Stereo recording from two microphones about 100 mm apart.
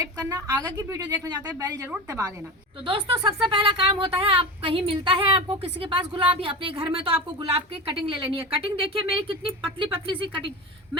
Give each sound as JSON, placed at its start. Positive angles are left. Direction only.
{"t": 0.0, "sound": "a woman's voice", "side_deg": -40}
{"t": 1.1, "sound": "a woman's voice", "side_deg": -45}
{"t": 2.8, "sound": "a woman's voice", "side_deg": -60}